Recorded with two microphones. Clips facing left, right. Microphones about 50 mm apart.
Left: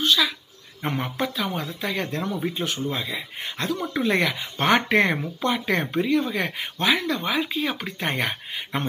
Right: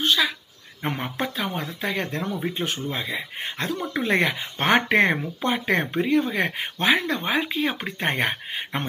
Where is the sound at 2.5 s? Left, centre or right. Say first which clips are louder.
Left 1 dB; right.